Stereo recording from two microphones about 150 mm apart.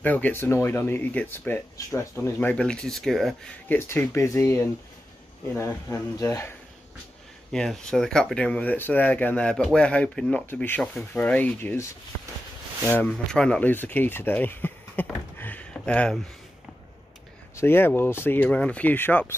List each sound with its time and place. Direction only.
0.0 s speech: 10° left (ahead or behind)
2.5 s speech: 5° left (ahead or behind)
3.6 s speech: 15° left (ahead or behind)
7.5 s speech: 5° left (ahead or behind)
17.6 s speech: 15° left (ahead or behind)